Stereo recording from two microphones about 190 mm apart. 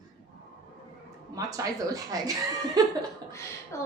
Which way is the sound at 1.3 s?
20° right (ahead or behind).